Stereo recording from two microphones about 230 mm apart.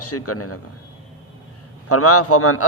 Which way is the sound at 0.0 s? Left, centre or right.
Left.